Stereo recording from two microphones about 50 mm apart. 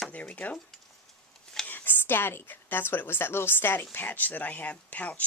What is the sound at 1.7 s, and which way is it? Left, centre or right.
A woman's voice, left.